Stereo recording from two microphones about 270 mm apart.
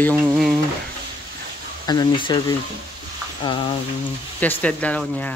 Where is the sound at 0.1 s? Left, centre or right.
Centre.